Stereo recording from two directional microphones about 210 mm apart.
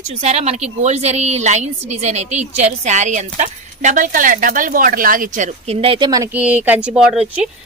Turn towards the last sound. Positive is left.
turn(degrees=-5)  # may be behind; listen again after turning